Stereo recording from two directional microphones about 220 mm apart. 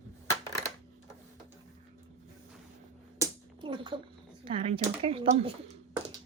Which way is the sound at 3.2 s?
20° right (ahead or behind).